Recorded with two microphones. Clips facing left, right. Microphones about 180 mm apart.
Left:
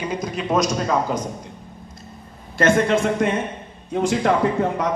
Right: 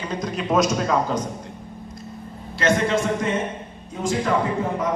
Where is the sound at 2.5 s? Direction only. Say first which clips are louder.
Left 3 dB; 50° left (ahead or behind).